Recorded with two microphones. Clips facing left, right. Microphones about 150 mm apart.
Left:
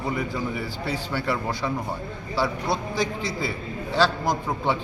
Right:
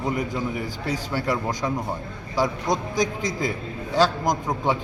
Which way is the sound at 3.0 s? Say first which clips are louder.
Right 2 dB; 45° right (ahead or behind).